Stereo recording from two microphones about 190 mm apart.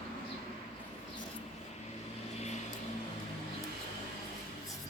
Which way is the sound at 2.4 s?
35° left (ahead or behind).